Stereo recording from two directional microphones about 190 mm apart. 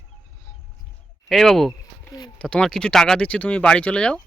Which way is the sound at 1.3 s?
Centre (ahead or behind).